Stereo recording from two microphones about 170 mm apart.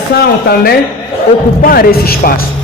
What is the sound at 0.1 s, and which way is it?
A woman's voice, 65° left (ahead or behind).